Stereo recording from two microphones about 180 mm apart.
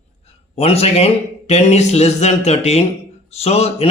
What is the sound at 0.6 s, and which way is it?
A man's voice, 35° left (ahead or behind).